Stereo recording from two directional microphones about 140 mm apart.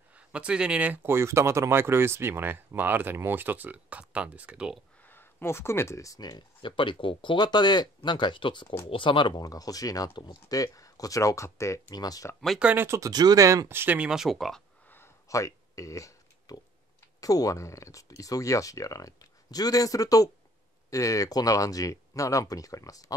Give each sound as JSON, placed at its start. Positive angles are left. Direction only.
{"t": 0.1, "sound": "speech", "side_deg": -10}
{"t": 5.0, "sound": "speech", "side_deg": 15}
{"t": 12.4, "sound": "speech", "side_deg": 0}
{"t": 12.6, "sound": "speech", "side_deg": -15}
{"t": 14.9, "sound": "a sound", "side_deg": 20}
{"t": 17.2, "sound": "speech", "side_deg": 25}